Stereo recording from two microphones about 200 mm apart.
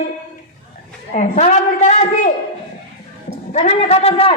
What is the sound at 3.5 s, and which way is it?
Speech, 35° left (ahead or behind).